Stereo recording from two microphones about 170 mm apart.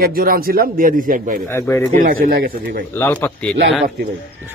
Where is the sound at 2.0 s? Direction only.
55° right (ahead or behind).